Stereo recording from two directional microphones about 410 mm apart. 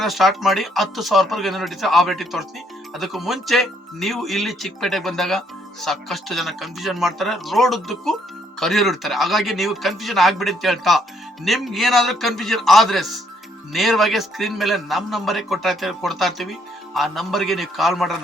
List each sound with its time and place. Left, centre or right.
0.0 s a man's voice: centre